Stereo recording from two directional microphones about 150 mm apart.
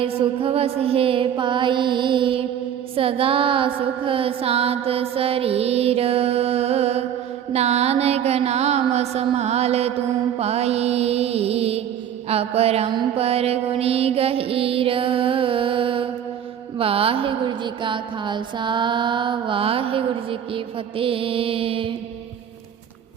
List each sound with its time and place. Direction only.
0.0 s mantra: 35° right (ahead or behind)
10.3 s music: 45° right (ahead or behind)
12.3 s mantra: 40° right (ahead or behind)